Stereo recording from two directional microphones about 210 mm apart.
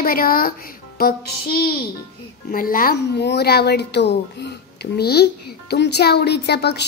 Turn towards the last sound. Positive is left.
turn(degrees=50)  # may be behind; listen again after turning